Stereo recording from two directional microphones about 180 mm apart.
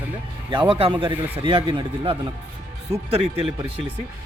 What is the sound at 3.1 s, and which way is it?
Speech, 35° right (ahead or behind).